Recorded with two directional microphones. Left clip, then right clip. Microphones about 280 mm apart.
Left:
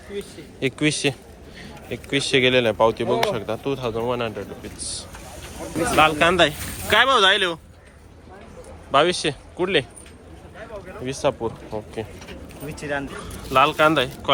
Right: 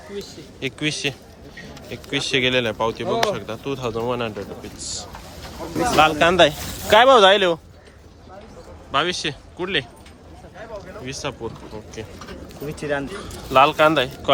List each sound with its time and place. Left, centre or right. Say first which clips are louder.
0.6 s speech: left 3 dB; centre
5.4 s a sound: right 2 dB; right
6.0 s speech: right 2 dB; centre
8.9 s a man's voice: left 3 dB; centre
11.0 s speech: left 7 dB; centre
12.6 s speech: right 3 dB; right
13.2 s speech: right 3 dB; centre